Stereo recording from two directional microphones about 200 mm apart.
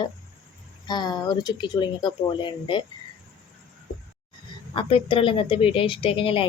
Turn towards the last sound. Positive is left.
turn(degrees=25)  # may be behind; listen again after turning